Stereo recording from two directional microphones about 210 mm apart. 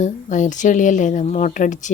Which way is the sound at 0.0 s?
35° left (ahead or behind).